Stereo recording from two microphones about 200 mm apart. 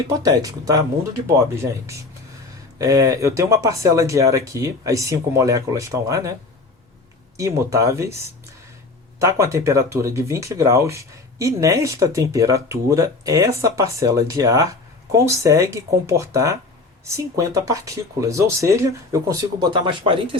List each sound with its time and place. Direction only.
0.2 s speech: 15° right (ahead or behind)
2.7 s speech: 15° right (ahead or behind)
7.3 s speech: 15° right (ahead or behind)
9.1 s speech: 15° right (ahead or behind)